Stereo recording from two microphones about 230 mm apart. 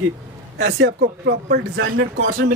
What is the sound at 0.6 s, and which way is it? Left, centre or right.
Speech, right.